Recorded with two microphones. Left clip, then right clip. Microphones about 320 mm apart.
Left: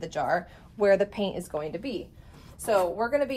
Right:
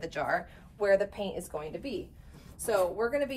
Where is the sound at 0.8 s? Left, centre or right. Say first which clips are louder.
Left 4 dB; left.